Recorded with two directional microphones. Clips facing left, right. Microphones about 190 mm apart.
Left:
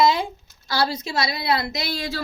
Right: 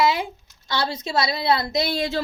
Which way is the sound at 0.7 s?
25° right (ahead or behind).